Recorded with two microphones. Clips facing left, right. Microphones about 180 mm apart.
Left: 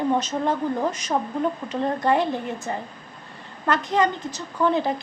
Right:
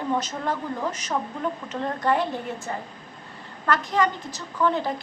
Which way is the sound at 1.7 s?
15° left (ahead or behind).